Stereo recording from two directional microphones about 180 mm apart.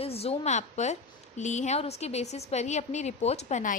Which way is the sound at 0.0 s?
35° left (ahead or behind).